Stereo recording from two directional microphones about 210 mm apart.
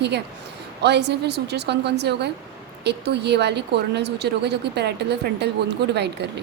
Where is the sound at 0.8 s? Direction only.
55° right (ahead or behind).